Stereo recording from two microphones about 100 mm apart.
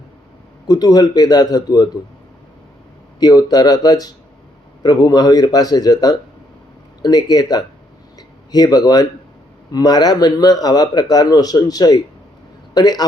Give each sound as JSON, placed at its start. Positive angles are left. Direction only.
{"t": 0.7, "sound": "a man's voice", "side_deg": 40}
{"t": 3.2, "sound": "a man's voice", "side_deg": 40}